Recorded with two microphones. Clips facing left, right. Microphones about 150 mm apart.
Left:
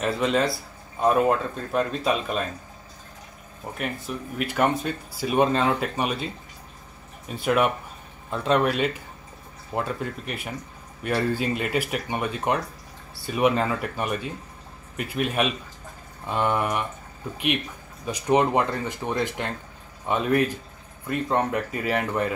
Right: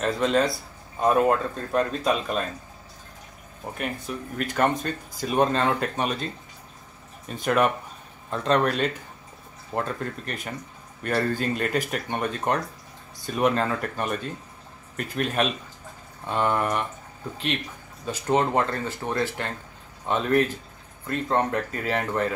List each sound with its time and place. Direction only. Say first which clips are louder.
0.0 s speech: right 1 dB; 5° left (ahead or behind)
3.7 s speech: left 1 dB; centre (ahead or behind)
7.4 s speech: even; 5° left (ahead or behind)
18.0 s speech: left 2 dB; 15° left (ahead or behind)